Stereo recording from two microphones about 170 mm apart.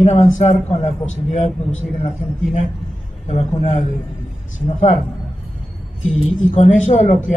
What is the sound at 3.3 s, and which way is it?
Speech, 40° left (ahead or behind).